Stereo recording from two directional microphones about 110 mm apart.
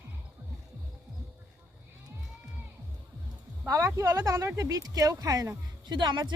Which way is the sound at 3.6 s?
30° right (ahead or behind).